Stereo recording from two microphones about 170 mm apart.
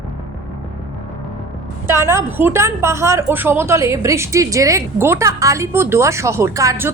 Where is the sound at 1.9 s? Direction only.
15° right (ahead or behind).